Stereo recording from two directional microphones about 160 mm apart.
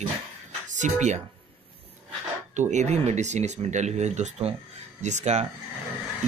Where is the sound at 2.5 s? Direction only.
50° right (ahead or behind).